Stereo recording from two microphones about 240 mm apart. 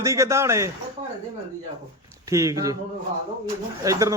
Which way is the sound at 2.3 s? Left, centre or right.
Centre.